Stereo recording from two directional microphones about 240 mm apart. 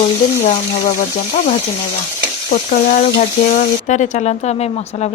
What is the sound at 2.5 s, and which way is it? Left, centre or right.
A woman's voice, left.